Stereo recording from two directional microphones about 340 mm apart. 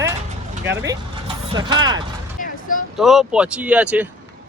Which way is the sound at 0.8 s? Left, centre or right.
Centre.